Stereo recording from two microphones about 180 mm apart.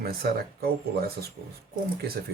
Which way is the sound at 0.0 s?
60° right (ahead or behind).